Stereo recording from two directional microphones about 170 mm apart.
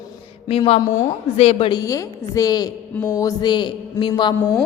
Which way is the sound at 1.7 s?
20° left (ahead or behind).